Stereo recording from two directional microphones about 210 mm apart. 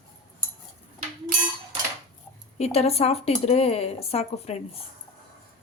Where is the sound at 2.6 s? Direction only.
30° left (ahead or behind).